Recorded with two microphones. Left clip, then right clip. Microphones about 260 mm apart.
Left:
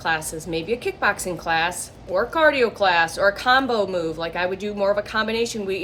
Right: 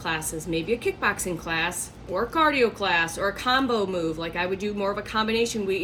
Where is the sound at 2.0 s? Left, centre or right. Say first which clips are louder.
Left 4 dB; centre.